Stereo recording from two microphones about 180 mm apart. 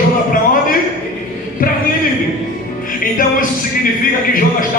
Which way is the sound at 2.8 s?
50° left (ahead or behind).